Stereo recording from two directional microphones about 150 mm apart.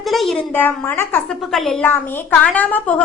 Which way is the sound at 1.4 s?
Centre (ahead or behind).